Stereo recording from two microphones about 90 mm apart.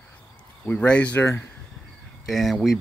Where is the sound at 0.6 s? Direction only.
15° left (ahead or behind).